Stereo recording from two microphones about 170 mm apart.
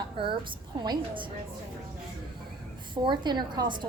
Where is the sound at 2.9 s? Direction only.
25° right (ahead or behind).